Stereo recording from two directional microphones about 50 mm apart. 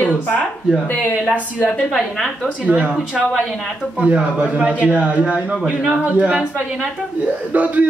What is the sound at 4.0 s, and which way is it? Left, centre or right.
Speech, right.